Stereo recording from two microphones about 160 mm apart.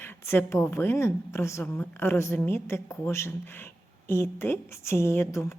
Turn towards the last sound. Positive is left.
turn(degrees=15)  # may be behind; listen again after turning